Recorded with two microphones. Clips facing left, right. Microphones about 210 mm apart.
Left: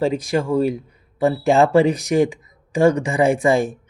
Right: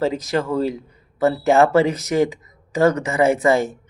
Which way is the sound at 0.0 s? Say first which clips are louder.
Left 1 dB; 15° left (ahead or behind).